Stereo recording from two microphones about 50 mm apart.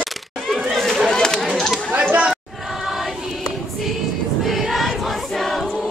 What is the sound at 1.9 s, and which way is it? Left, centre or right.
Chatter, right.